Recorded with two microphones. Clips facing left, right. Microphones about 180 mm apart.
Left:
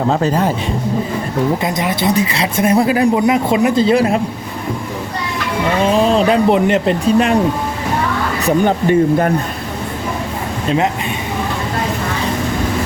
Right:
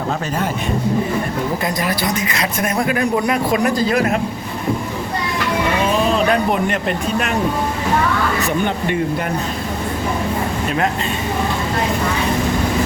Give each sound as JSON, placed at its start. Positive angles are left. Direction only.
{"t": 1.6, "sound": "speech", "side_deg": 20}
{"t": 6.1, "sound": "speech", "side_deg": 25}
{"t": 8.4, "sound": "speech", "side_deg": 40}